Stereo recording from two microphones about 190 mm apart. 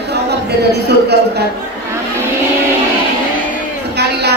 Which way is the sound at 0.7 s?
60° right (ahead or behind).